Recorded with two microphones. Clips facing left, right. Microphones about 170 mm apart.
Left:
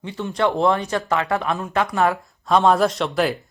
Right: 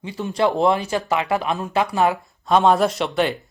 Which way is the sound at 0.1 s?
10° right (ahead or behind).